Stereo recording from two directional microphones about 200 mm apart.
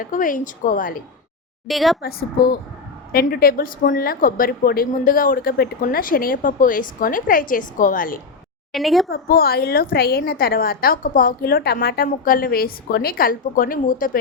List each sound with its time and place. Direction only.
0.0 s a woman's voice: 40° left (ahead or behind)
1.6 s a woman's voice: centre (ahead or behind)
2.0 s a woman's voice: 50° left (ahead or behind)
8.7 s a woman's voice: centre (ahead or behind)
9.0 s a woman's voice: 50° left (ahead or behind)